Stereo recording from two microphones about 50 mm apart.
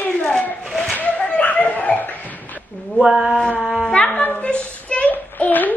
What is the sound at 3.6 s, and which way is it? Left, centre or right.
Shofar, centre.